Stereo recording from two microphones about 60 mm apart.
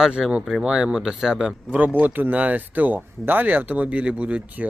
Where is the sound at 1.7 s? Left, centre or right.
Right.